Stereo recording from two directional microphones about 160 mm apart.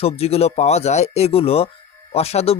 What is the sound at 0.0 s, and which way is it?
Speech, 40° left (ahead or behind).